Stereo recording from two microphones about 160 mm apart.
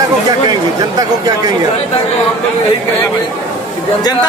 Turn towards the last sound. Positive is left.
turn(degrees=25)  # may be behind; listen again after turning